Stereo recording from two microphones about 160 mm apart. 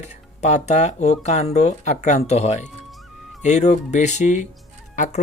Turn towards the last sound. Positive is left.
turn(degrees=50)  # may be behind; listen again after turning